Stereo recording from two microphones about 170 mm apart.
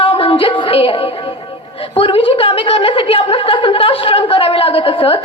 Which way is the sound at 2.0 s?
35° left (ahead or behind).